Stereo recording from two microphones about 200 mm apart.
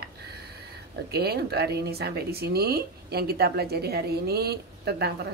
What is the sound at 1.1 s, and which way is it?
Speech, 50° right (ahead or behind).